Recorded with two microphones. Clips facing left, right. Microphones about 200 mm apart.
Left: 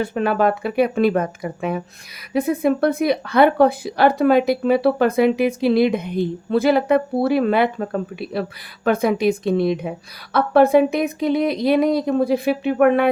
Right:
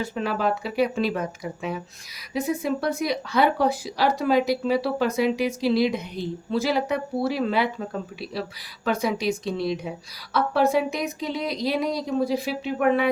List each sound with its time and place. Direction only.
0.0 s speech: 55° left (ahead or behind)